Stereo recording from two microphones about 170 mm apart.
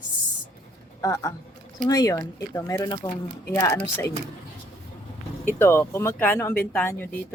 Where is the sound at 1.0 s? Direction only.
20° left (ahead or behind).